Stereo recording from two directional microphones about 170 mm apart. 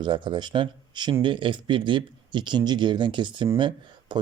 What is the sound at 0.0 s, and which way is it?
Speech, 30° right (ahead or behind).